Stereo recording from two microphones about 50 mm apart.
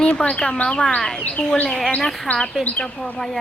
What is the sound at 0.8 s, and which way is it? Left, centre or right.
Speech, centre.